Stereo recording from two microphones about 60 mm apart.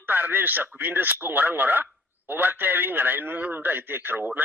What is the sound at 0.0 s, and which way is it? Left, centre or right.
Speech, right.